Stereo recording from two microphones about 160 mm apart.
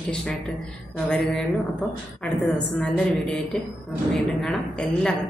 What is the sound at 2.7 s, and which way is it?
Speech, 5° left (ahead or behind).